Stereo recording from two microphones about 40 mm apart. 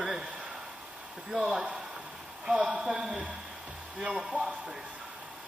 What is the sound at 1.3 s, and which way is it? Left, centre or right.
A man's voice, centre.